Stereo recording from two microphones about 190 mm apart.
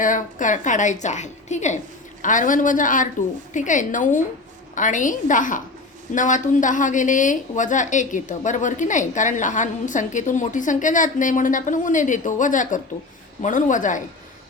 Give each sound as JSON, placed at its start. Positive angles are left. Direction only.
{"t": 0.0, "sound": "a woman's voice", "side_deg": 45}